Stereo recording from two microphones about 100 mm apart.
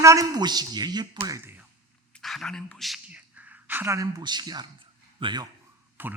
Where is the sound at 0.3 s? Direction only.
45° right (ahead or behind).